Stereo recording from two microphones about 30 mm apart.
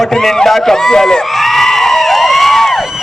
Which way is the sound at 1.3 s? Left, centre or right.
Centre.